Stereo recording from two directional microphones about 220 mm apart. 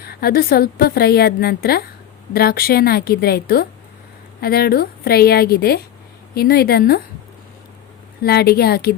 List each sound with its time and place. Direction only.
0.0 s a woman's voice: 45° left (ahead or behind)
8.2 s a woman's voice: 45° left (ahead or behind)